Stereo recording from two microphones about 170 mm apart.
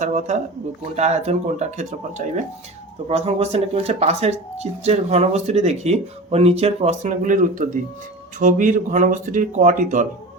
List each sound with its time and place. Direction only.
0.0 s speech: 45° right (ahead or behind)